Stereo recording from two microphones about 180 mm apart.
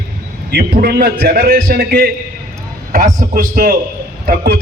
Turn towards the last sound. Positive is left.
turn(degrees=-55)  # may be behind; listen again after turning